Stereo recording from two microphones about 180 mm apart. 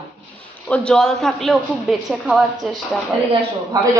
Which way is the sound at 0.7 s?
5° left (ahead or behind).